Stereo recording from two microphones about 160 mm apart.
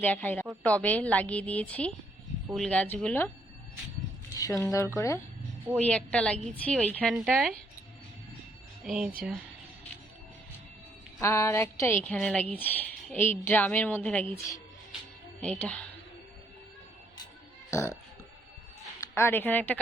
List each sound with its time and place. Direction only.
0.0 s a woman's voice: 10° left (ahead or behind)
4.4 s speech: 20° left (ahead or behind)
5.7 s a woman's voice: 10° left (ahead or behind)
8.8 s speech: 5° right (ahead or behind)
11.2 s a woman's voice: 20° left (ahead or behind)
15.4 s a woman's voice: 10° left (ahead or behind)
17.7 s speech: 20° left (ahead or behind)
18.9 s speech: 15° left (ahead or behind)